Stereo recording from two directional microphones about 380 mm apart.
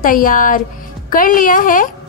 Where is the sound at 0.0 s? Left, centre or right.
Left.